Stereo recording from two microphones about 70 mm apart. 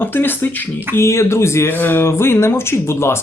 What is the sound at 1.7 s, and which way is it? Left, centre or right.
Speech, left.